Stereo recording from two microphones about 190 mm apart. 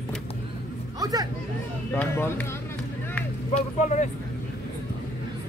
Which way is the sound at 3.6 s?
40° left (ahead or behind).